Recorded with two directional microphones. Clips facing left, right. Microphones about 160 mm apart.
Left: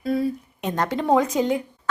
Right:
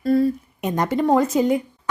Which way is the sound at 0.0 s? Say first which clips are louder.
Right 5 dB; centre (ahead or behind).